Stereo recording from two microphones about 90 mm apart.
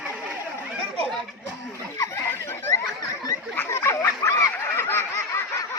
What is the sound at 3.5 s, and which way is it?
Snicker, 30° left (ahead or behind).